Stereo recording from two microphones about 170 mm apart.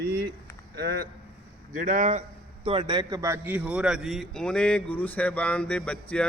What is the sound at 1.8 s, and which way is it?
Speech, 45° right (ahead or behind).